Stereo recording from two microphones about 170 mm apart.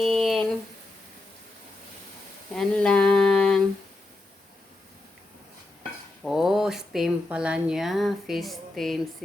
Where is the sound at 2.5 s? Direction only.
5° left (ahead or behind).